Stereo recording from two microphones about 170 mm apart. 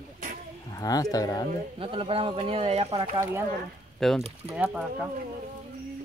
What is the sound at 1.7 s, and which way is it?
Speech, 30° right (ahead or behind).